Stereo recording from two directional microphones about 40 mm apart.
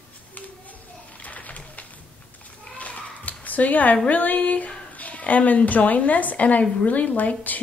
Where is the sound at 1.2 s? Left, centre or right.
Left.